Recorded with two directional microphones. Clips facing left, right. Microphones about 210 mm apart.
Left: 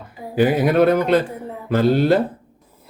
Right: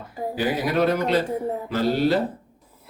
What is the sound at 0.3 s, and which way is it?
Speech, 55° left (ahead or behind).